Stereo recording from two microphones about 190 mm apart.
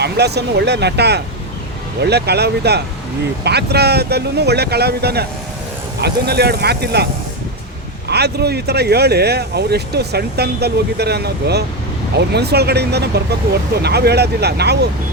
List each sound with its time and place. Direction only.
0.0 s speech: 60° right (ahead or behind)
8.1 s speech: 60° right (ahead or behind)